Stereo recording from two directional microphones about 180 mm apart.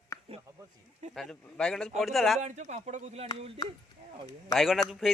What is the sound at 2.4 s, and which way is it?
Speech, 40° right (ahead or behind).